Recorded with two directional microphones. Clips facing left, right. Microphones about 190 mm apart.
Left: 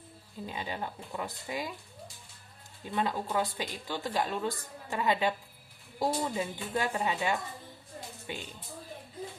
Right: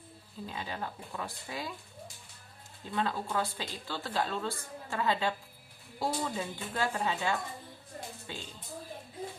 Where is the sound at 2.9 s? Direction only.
15° left (ahead or behind).